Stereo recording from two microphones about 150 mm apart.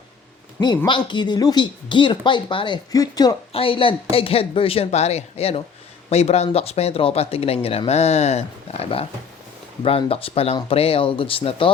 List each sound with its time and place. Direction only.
0.9 s speech: 30° left (ahead or behind)
3.5 s speech: 40° left (ahead or behind)